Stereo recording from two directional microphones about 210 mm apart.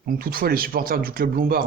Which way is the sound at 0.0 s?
45° right (ahead or behind).